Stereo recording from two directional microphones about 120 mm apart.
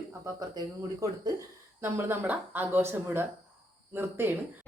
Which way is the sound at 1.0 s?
30° right (ahead or behind).